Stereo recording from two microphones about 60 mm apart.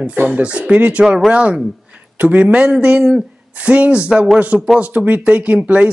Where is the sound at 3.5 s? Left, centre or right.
Right.